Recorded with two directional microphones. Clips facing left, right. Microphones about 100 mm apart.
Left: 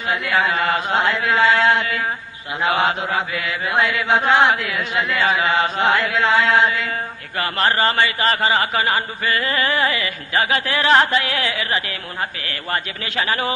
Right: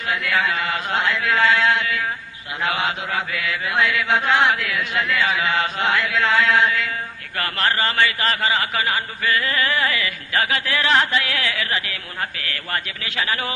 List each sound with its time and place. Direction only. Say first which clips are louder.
0.0 s chant: left 2 dB; 25° left (ahead or behind)
0.7 s a man's voice: left 3 dB; 30° left (ahead or behind)
3.2 s chant: left 2 dB; 25° left (ahead or behind)
5.2 s a man's voice: left 5 dB; 30° left (ahead or behind)
6.2 s chant: left 2 dB; 25° left (ahead or behind)
7.3 s a man's voice: left 3 dB; 25° left (ahead or behind)
12.2 s chant: left 1 dB; 25° left (ahead or behind)